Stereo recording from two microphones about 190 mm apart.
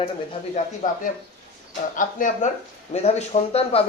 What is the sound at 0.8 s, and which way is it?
Speech, 45° left (ahead or behind).